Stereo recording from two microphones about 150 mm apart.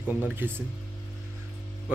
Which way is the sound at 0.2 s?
15° right (ahead or behind).